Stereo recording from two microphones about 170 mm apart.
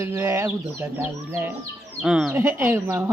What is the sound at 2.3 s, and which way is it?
Speech, 15° right (ahead or behind).